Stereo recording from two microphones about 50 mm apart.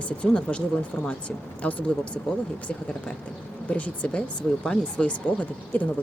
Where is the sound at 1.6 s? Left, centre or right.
Left.